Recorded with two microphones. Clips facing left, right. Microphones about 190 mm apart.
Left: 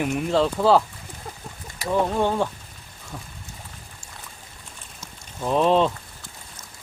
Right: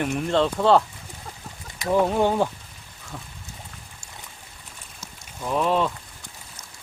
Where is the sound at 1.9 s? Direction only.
10° right (ahead or behind).